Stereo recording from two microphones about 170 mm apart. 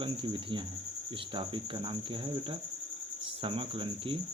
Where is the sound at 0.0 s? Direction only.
30° right (ahead or behind).